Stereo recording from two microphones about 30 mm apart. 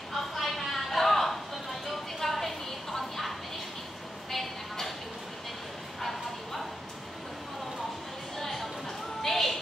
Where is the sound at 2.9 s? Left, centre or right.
Centre.